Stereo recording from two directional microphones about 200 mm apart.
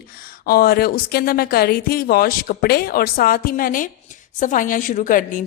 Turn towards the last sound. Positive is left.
turn(degrees=40)  # may be behind; listen again after turning